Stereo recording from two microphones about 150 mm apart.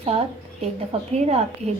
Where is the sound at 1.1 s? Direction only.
45° right (ahead or behind).